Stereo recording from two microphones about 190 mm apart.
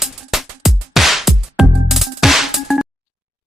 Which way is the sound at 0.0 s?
Centre (ahead or behind).